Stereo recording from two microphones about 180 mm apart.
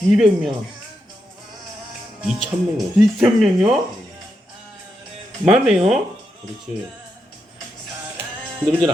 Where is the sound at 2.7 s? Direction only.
Centre (ahead or behind).